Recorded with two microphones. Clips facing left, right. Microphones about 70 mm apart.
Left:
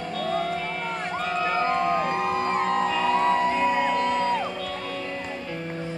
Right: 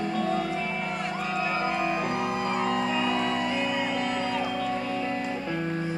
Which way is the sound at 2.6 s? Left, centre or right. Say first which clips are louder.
Left 3 dB; left.